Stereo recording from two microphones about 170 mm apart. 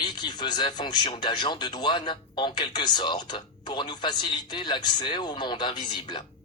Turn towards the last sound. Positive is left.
turn(degrees=25)  # may be behind; listen again after turning